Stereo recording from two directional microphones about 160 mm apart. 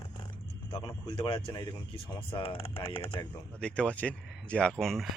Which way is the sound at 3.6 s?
5° left (ahead or behind).